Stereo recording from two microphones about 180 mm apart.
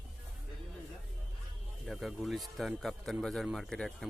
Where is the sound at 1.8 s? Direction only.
Centre (ahead or behind).